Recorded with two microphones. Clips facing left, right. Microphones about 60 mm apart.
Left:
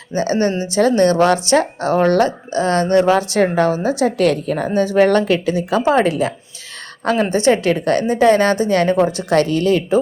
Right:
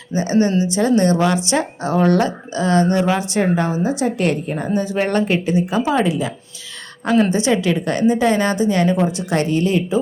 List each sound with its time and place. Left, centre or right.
0.1 s a woman's voice: left
5.8 s a woman's voice: left